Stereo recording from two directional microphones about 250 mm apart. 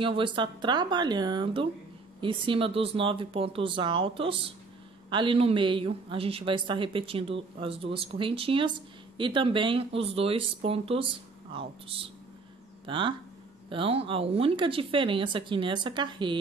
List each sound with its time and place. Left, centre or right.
0.0 s speech: centre